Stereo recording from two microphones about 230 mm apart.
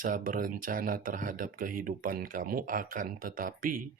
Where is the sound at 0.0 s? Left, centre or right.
Right.